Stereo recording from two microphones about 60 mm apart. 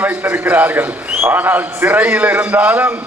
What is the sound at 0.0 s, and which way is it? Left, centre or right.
A man's voice, right.